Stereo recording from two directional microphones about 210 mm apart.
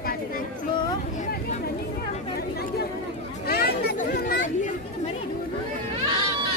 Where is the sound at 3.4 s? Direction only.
50° left (ahead or behind).